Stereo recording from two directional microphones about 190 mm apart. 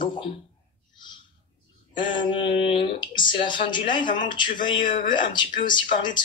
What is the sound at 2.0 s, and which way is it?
Speech, 25° left (ahead or behind).